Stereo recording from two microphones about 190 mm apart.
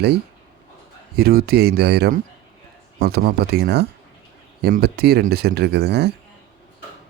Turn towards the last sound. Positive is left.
turn(degrees=-60)  # may be behind; listen again after turning